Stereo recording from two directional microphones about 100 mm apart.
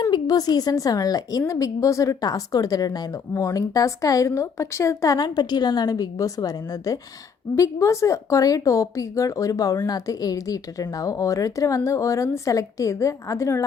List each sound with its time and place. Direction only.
0.0 s a woman's voice: 40° left (ahead or behind)